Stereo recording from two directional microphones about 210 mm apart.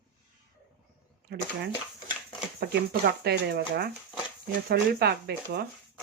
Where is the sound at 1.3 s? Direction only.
50° right (ahead or behind).